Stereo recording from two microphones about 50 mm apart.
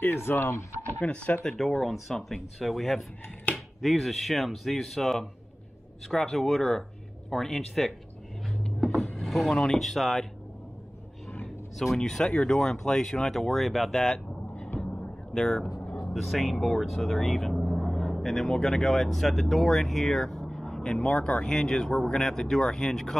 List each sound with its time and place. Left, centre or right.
0.0 s speech: left
1.0 s speech: left
1.9 s speech: centre
9.1 s speech: centre
12.0 s speech: centre
14.8 s vehicle: centre
15.3 s speech: centre
16.1 s speech: centre
20.9 s speech: left